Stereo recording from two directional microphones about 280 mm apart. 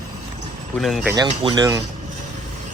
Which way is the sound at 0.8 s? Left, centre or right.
Centre.